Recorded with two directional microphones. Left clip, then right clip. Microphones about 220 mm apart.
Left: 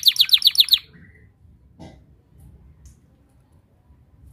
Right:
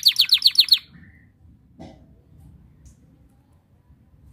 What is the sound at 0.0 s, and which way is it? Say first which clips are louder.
Bird: left 1 dB; 10° left (ahead or behind).